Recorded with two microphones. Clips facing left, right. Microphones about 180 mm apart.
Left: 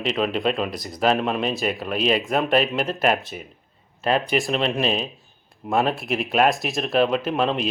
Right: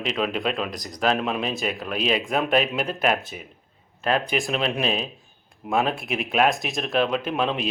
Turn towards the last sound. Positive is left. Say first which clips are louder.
# left 2 dB
turn(degrees=0)  # may be behind; listen again after turning